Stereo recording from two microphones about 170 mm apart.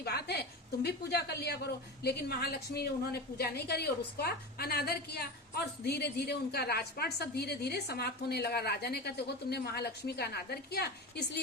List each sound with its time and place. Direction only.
0.0 s a woman's voice: 70° left (ahead or behind)